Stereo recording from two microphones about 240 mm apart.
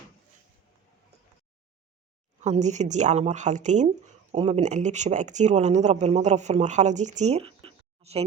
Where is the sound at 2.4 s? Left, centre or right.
Right.